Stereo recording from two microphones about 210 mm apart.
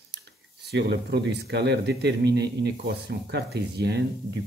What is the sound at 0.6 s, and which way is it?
Speech, 55° right (ahead or behind).